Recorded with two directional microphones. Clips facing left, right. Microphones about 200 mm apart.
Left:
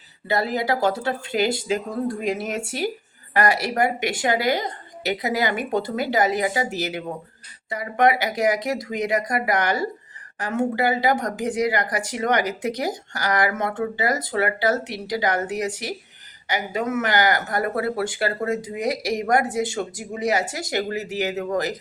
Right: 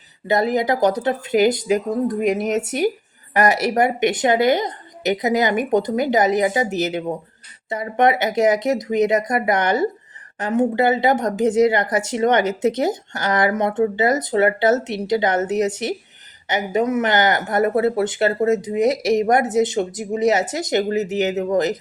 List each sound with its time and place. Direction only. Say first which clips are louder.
0.3 s speech: right 5 dB; 20° right (ahead or behind)